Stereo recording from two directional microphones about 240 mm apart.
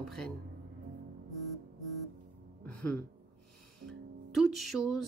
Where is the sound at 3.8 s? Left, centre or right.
Centre.